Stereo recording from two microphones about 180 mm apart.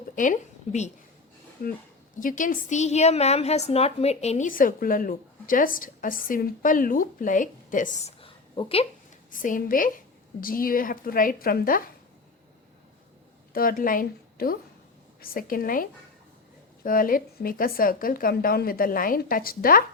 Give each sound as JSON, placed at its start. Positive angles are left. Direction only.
{"t": 0.2, "sound": "a woman's voice", "side_deg": 40}
{"t": 9.3, "sound": "a woman's voice", "side_deg": 45}
{"t": 13.5, "sound": "a woman's voice", "side_deg": 50}